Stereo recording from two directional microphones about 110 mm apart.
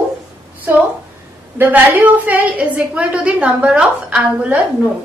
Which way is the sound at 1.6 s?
15° right (ahead or behind).